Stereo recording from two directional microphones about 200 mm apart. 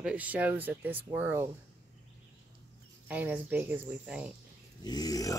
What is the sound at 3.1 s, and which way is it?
Speech, 10° right (ahead or behind).